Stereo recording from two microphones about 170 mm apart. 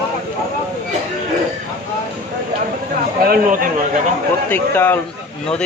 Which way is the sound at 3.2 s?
60° right (ahead or behind).